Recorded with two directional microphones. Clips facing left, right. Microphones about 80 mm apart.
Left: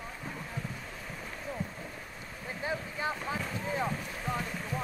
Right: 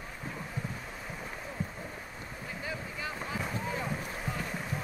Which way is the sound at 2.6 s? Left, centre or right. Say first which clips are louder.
Left 5 dB; left.